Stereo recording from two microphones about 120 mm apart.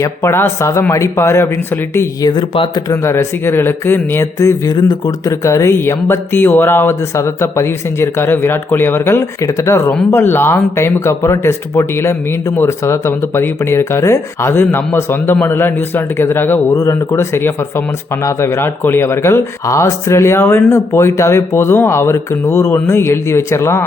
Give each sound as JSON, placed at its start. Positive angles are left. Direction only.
{"t": 0.0, "sound": "speech", "side_deg": 20}
{"t": 2.2, "sound": "speech", "side_deg": 40}
{"t": 2.9, "sound": "speech", "side_deg": 25}